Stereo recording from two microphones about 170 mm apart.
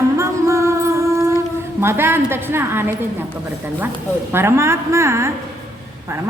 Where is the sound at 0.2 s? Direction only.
15° right (ahead or behind).